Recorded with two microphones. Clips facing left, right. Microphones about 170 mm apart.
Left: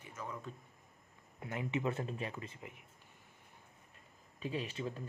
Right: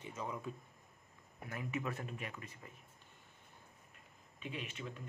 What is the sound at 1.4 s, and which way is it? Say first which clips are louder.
Speech: left 4 dB; 25° left (ahead or behind).